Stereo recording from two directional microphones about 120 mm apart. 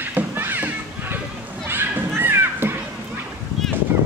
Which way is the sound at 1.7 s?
20° right (ahead or behind).